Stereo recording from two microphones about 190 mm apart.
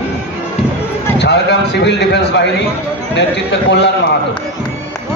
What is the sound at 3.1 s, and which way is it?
Speech, 65° left (ahead or behind).